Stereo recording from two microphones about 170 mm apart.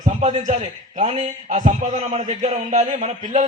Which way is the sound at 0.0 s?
45° right (ahead or behind).